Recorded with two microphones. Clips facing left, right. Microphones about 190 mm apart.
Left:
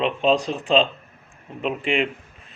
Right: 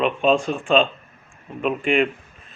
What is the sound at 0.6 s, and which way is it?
Speech, 20° left (ahead or behind).